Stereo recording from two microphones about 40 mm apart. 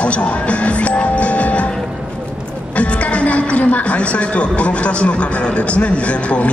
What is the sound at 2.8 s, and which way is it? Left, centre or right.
A man's voice, left.